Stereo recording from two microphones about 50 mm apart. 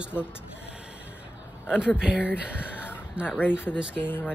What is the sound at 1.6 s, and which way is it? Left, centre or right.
Speech, centre.